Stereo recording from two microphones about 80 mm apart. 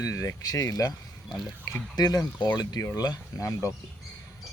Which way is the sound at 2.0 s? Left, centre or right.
Left.